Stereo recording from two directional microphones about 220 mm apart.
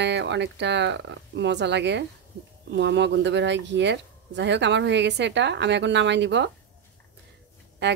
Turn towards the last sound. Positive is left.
turn(degrees=-55)  # may be behind; listen again after turning